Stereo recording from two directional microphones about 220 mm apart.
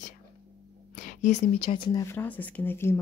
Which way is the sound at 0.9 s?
35° left (ahead or behind).